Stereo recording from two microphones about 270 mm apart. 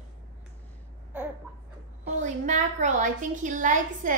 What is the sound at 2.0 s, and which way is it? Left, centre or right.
A woman's voice, right.